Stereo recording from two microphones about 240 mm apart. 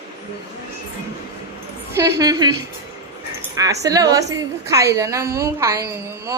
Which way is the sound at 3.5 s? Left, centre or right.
Centre.